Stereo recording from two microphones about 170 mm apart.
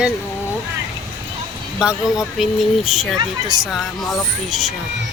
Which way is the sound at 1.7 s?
5° right (ahead or behind).